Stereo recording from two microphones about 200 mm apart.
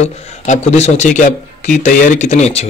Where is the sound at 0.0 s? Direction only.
35° left (ahead or behind).